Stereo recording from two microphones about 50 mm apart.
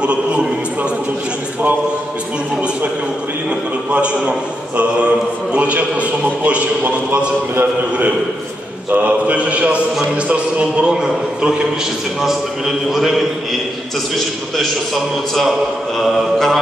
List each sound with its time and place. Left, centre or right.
0.0 s a man's voice: right
3.4 s a man's voice: right
8.9 s a man's voice: right; by 13.2 s centre
16.0 s mantra: centre